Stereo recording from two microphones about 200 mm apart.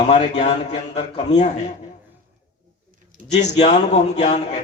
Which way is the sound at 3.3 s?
35° left (ahead or behind).